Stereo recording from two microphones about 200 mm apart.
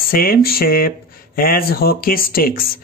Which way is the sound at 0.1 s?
50° left (ahead or behind).